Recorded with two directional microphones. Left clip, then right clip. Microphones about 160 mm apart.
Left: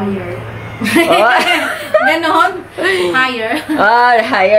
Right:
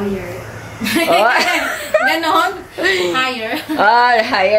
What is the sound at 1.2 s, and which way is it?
A woman's voice, 15° right (ahead or behind).